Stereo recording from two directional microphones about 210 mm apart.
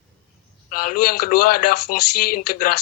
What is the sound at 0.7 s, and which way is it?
Speech, 45° left (ahead or behind).